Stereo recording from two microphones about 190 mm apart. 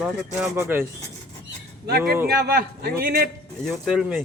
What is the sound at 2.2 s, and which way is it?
A man's voice, 55° right (ahead or behind).